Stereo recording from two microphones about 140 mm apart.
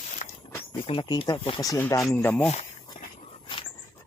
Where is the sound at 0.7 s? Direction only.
40° left (ahead or behind).